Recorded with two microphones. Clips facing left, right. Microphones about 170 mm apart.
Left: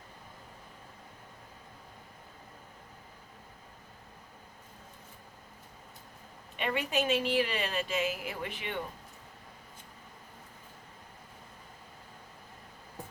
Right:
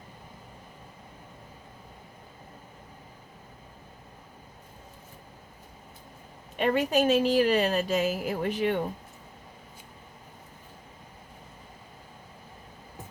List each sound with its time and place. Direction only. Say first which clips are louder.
6.6 s a woman's voice: right 7 dB; 40° right (ahead or behind)